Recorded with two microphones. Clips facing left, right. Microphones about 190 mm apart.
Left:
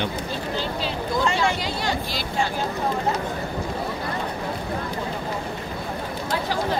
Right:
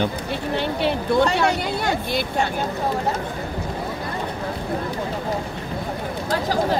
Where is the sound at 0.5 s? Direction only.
65° right (ahead or behind).